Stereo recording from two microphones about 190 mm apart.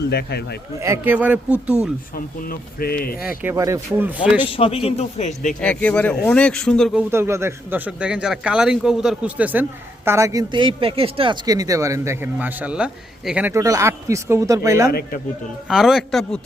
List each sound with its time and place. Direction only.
0.1 s speech: 60° left (ahead or behind)
0.8 s speech: 10° right (ahead or behind)
2.1 s speech: 50° left (ahead or behind)
3.2 s speech: 15° right (ahead or behind)
4.4 s a man's voice: 30° left (ahead or behind)
5.5 s speech: 5° left (ahead or behind)
7.1 s speech: 15° right (ahead or behind)
14.8 s speech: 50° left (ahead or behind)
15.7 s speech: centre (ahead or behind)